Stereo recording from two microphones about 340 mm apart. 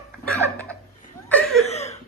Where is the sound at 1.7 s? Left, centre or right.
Centre.